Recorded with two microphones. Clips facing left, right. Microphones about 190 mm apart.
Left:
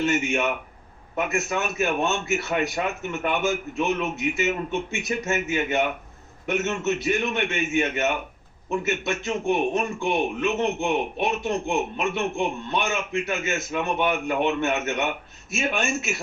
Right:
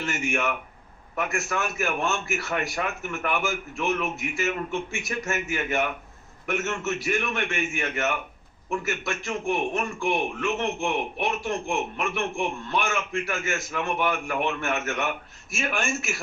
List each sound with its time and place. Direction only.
0.0 s a man's voice: 20° left (ahead or behind)